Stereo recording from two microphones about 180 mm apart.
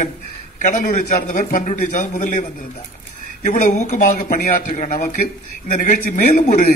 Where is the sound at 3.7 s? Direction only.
40° left (ahead or behind).